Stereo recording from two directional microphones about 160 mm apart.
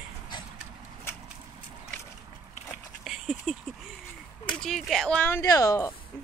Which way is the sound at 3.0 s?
Centre (ahead or behind).